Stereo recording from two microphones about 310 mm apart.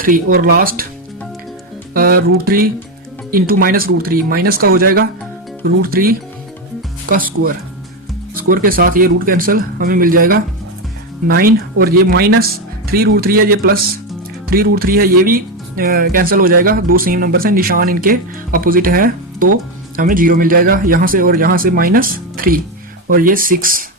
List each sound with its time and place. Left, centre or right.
0.0 s speech: right
1.9 s speech: right